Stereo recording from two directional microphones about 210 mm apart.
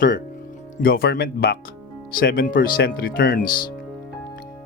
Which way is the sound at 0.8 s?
45° left (ahead or behind).